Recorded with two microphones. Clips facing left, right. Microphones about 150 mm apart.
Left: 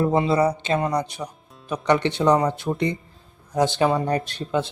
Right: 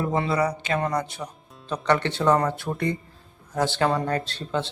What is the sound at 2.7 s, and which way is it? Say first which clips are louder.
Speech: left 4 dB; 5° left (ahead or behind).